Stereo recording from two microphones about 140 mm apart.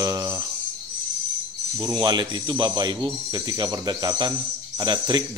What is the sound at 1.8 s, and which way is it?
Speech, 30° right (ahead or behind).